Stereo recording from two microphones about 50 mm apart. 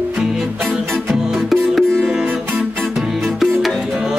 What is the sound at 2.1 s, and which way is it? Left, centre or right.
Music, centre.